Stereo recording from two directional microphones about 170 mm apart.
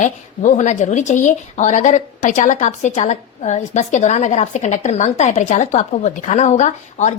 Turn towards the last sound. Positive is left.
turn(degrees=45)  # may be behind; listen again after turning